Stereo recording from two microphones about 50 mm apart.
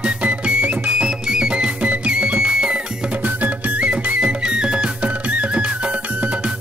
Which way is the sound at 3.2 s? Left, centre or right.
Right.